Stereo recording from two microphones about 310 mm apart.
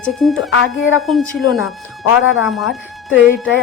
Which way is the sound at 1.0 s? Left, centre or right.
Centre.